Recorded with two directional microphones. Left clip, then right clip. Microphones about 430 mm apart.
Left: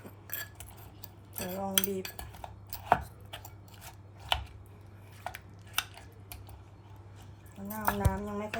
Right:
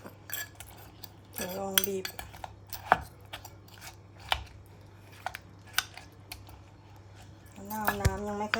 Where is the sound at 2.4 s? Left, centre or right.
Centre.